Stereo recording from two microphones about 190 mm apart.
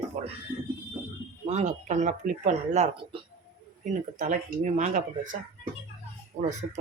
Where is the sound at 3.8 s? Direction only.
40° right (ahead or behind).